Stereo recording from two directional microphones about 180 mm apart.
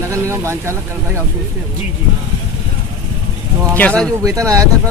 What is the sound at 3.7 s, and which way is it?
Speech, 10° left (ahead or behind).